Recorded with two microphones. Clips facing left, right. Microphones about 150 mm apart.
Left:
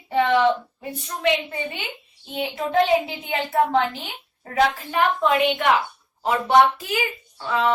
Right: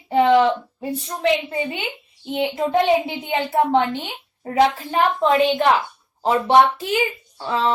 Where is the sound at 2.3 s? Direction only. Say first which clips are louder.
Right 5 dB; 25° right (ahead or behind).